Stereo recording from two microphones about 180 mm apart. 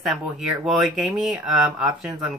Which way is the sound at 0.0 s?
Centre (ahead or behind).